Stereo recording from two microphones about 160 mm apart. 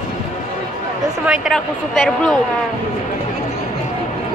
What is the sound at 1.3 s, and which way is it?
Speech, centre (ahead or behind).